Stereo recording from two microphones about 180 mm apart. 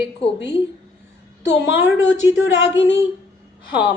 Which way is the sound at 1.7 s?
10° right (ahead or behind).